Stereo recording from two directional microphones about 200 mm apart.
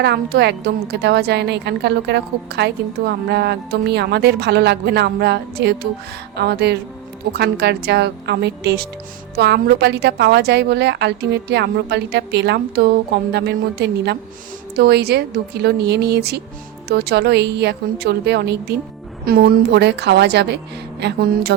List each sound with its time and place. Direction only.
0.0 s a woman's voice: 55° right (ahead or behind)